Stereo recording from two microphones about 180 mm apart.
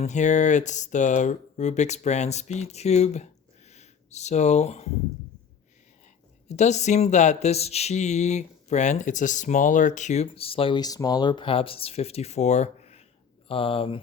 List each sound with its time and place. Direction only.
0.0 s speech: 40° left (ahead or behind)
6.5 s speech: 40° left (ahead or behind)